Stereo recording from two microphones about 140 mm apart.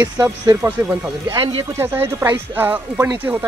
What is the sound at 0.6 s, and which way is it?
Speech, 20° right (ahead or behind).